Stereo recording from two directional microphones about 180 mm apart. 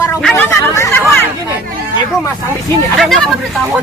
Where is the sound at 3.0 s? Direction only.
Centre (ahead or behind).